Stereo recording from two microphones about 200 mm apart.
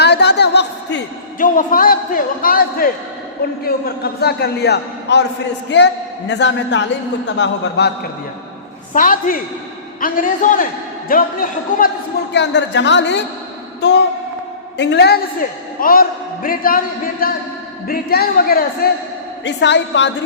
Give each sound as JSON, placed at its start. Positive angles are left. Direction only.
{"t": 0.0, "sound": "a sound", "side_deg": 55}
{"t": 1.4, "sound": "a man's voice", "side_deg": 45}
{"t": 8.9, "sound": "a man's voice", "side_deg": 45}
{"t": 12.3, "sound": "a man's voice", "side_deg": 60}
{"t": 19.5, "sound": "a man's voice", "side_deg": 60}